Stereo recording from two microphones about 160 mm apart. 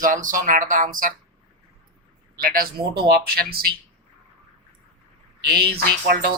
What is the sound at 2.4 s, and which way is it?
Speech, 65° right (ahead or behind).